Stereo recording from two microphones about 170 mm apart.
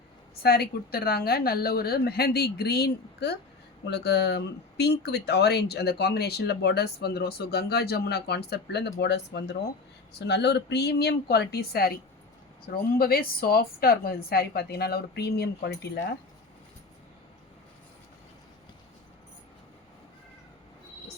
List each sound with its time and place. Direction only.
0.4 s speech: 65° left (ahead or behind)